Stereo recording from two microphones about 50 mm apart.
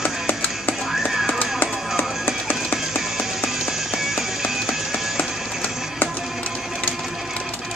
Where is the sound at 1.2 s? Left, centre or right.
Left.